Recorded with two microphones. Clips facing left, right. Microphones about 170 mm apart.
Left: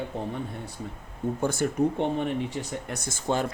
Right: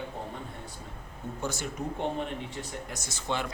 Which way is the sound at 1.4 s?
55° left (ahead or behind).